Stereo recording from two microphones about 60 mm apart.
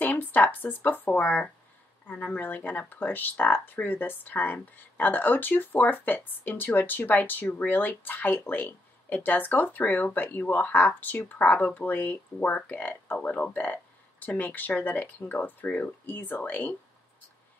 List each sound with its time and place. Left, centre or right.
0.0 s speech: left